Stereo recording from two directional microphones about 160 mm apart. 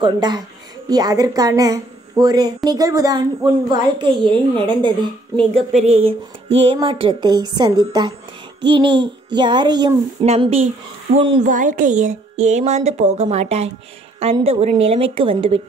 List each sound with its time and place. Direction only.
0.0 s a woman's voice: 25° right (ahead or behind)
5.5 s a woman's voice: 40° right (ahead or behind); by 9.9 s 25° right (ahead or behind)
10.2 s speech: 40° right (ahead or behind)
11.4 s a woman's voice: 50° right (ahead or behind); by 15.6 s 35° right (ahead or behind)